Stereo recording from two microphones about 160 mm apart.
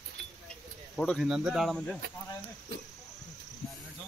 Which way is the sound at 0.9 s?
5° left (ahead or behind).